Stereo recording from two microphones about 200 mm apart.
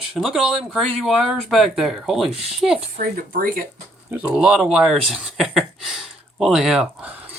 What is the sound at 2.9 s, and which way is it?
Speech, 45° right (ahead or behind).